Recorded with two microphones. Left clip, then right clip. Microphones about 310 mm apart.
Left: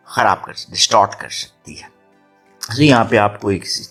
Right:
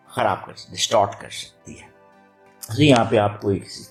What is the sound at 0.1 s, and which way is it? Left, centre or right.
Speech, left.